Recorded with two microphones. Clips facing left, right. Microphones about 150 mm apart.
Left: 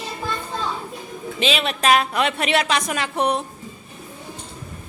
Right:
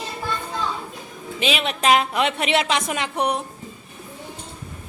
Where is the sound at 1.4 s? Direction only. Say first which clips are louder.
Left 1 dB; 15° right (ahead or behind).